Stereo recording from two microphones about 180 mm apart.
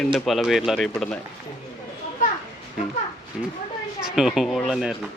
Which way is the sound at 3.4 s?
Centre (ahead or behind).